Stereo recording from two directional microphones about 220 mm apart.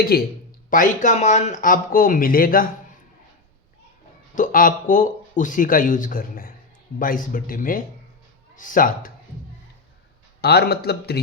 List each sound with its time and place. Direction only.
0.0 s a man's voice: 45° left (ahead or behind)
4.4 s speech: 40° left (ahead or behind)
10.4 s a man's voice: 45° left (ahead or behind)